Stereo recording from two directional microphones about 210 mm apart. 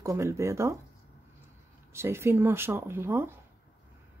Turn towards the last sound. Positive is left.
turn(degrees=-10)  # may be behind; listen again after turning